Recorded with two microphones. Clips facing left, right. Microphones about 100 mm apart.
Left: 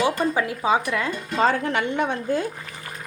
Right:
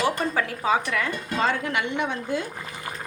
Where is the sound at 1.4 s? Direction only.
40° left (ahead or behind).